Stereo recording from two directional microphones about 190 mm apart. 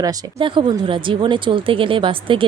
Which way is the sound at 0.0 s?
20° right (ahead or behind).